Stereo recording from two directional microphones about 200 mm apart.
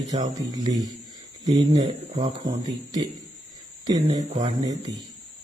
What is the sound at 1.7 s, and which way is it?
Speech, 30° right (ahead or behind).